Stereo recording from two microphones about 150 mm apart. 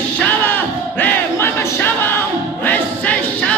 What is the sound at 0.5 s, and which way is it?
Crowd, 10° left (ahead or behind).